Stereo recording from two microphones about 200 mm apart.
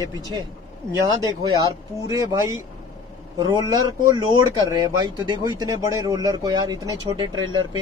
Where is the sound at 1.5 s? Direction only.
20° right (ahead or behind).